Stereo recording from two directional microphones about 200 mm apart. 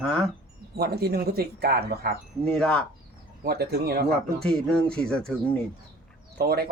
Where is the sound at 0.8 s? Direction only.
50° right (ahead or behind).